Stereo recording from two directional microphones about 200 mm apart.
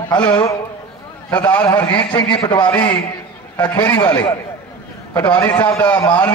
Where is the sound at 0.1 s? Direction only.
10° left (ahead or behind).